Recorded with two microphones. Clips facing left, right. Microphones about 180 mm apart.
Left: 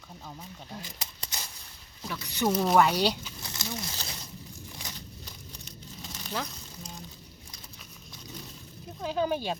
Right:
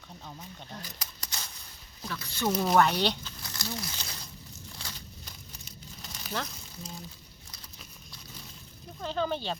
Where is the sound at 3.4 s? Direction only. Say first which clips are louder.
Even; 20° left (ahead or behind).